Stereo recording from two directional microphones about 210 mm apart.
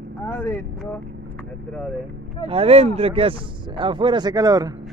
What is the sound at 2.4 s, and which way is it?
Speech, 25° right (ahead or behind).